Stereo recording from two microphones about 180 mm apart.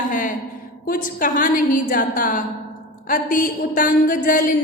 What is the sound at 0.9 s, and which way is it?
A woman's voice, 50° left (ahead or behind).